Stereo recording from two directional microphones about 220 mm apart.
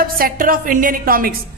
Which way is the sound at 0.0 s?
40° right (ahead or behind).